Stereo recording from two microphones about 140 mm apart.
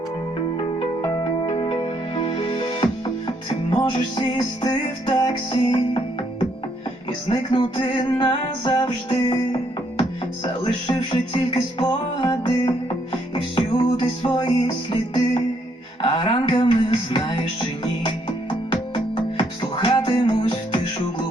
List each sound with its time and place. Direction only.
1.2 s music: 40° left (ahead or behind)
7.3 s music: 35° left (ahead or behind)